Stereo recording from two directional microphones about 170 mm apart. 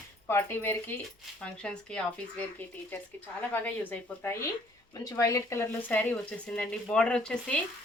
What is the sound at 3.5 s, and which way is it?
Speech, 10° left (ahead or behind).